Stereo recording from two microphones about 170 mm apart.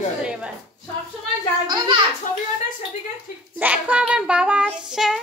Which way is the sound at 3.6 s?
10° right (ahead or behind).